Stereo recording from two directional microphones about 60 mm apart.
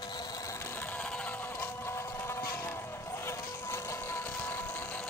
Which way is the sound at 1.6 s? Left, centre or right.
Left.